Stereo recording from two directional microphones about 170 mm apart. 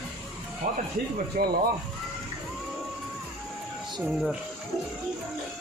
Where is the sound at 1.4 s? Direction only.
55° right (ahead or behind).